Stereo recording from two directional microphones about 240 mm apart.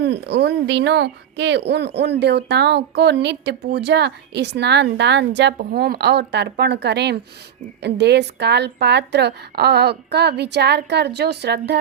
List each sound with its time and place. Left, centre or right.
0.0 s a woman's voice: right